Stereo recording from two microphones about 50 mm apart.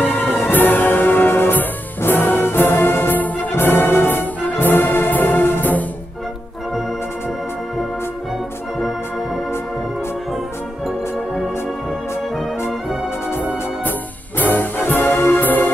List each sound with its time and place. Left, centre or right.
0.0 s music: left
4.4 s brass instrument: left
14.4 s music: left
15.4 s music: left